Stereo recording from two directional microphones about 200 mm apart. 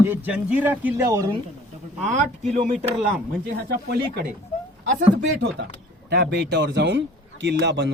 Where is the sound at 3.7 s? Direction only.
50° right (ahead or behind).